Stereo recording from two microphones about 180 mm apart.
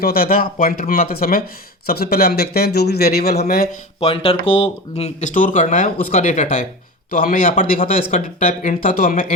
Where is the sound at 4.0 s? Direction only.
30° left (ahead or behind).